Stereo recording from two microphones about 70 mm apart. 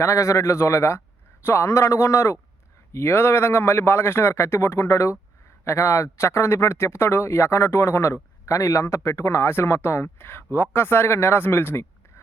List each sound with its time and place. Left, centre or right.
0.0 s a man's voice: left